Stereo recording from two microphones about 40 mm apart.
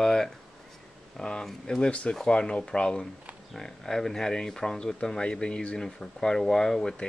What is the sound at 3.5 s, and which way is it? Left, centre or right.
Speech, centre.